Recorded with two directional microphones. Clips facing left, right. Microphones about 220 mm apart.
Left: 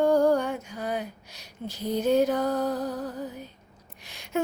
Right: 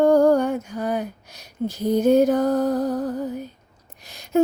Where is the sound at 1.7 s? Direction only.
45° right (ahead or behind).